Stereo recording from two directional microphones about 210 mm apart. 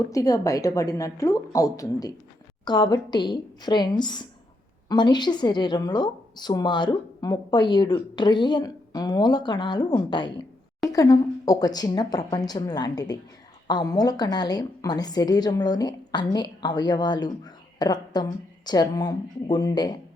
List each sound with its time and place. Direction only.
0.0 s a woman's voice: 15° left (ahead or behind)